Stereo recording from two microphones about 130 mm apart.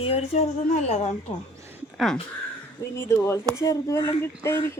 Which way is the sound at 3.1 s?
20° left (ahead or behind).